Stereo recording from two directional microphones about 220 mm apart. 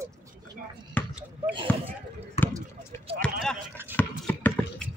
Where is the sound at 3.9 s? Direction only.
10° left (ahead or behind).